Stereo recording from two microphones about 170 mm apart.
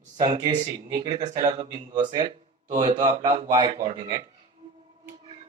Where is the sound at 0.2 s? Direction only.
25° right (ahead or behind).